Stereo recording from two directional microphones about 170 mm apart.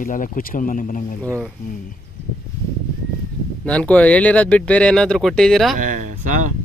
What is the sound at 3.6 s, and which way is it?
Speech, 5° left (ahead or behind).